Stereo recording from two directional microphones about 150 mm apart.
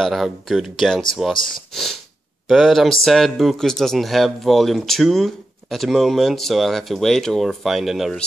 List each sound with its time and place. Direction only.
0.0 s speech: centre (ahead or behind)
2.4 s speech: centre (ahead or behind)